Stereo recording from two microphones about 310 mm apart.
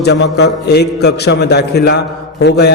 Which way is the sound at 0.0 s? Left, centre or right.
Left.